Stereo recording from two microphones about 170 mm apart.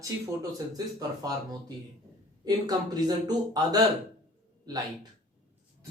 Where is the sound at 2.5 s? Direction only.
20° right (ahead or behind).